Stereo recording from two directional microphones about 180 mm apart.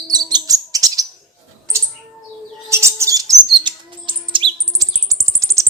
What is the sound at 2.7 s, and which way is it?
Bird, 15° right (ahead or behind).